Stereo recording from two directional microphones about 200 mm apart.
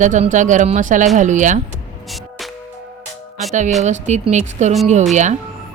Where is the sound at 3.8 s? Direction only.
35° right (ahead or behind).